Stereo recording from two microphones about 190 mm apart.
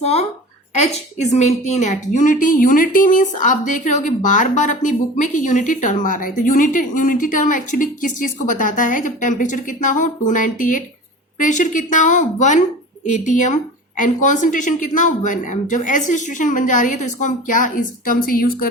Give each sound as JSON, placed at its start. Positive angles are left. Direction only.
{"t": 0.0, "sound": "a woman's voice", "side_deg": 35}